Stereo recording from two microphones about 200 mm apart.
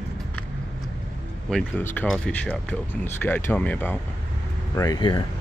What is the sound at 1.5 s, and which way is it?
Speech, 5° left (ahead or behind).